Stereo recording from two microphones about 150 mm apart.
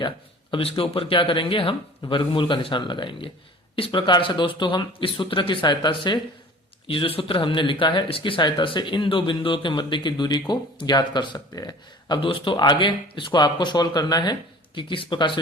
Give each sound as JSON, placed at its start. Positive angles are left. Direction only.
{"t": 0.5, "sound": "speech", "side_deg": 35}